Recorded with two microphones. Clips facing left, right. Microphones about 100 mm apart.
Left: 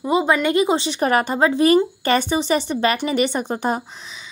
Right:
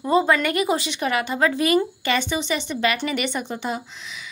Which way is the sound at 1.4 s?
30° left (ahead or behind).